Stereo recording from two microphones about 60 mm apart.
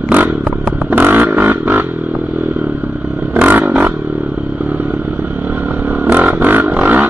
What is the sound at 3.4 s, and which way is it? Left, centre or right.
Vehicle, right.